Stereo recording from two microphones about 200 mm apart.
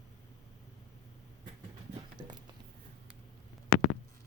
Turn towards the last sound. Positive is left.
turn(degrees=80)